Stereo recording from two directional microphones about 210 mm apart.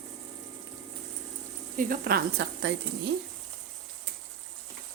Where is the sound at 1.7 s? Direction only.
45° right (ahead or behind).